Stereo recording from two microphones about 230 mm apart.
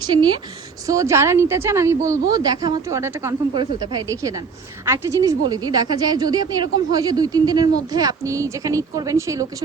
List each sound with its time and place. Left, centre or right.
0.0 s a woman's voice: centre